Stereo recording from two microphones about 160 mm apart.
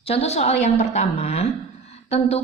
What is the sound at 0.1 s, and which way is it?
A woman's voice, 40° left (ahead or behind).